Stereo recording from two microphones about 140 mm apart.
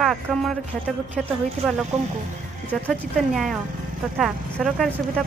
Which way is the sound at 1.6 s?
Centre (ahead or behind).